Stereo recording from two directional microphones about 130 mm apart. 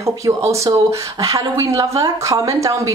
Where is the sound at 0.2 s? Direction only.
30° right (ahead or behind).